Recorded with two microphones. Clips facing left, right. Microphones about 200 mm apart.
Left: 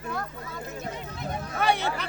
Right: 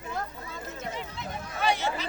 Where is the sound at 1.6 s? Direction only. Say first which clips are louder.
Left 2 dB; 60° left (ahead or behind).